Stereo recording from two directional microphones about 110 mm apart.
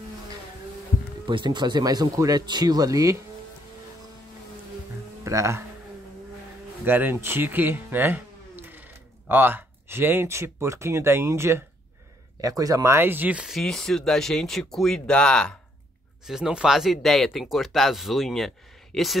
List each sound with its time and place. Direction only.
1.2 s speech: 45° right (ahead or behind)
5.2 s speech: 25° right (ahead or behind)
6.8 s speech: 20° right (ahead or behind)
13.6 s speech: 5° left (ahead or behind)
16.3 s speech: 5° right (ahead or behind)